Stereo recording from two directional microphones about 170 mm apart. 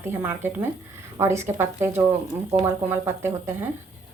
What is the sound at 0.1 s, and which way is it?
A woman's voice, 15° right (ahead or behind).